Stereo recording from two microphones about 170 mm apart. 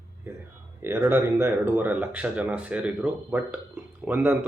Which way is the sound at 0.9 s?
10° right (ahead or behind).